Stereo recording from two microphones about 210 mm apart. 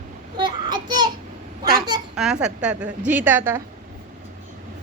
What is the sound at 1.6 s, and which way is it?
Speech, 45° right (ahead or behind).